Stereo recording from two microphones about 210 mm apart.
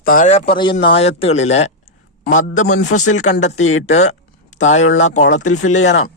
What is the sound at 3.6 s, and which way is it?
Speech, 75° left (ahead or behind).